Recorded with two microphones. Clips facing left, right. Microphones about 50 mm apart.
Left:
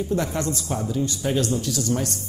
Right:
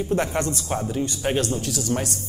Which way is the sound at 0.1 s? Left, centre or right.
Right.